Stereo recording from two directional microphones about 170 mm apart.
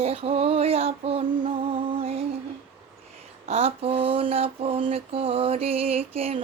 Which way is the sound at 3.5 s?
35° right (ahead or behind).